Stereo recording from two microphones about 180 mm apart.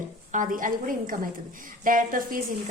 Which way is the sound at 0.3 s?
45° right (ahead or behind).